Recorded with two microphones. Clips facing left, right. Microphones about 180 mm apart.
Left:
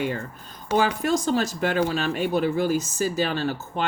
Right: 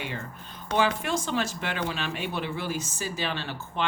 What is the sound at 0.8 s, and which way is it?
Speech, 40° left (ahead or behind).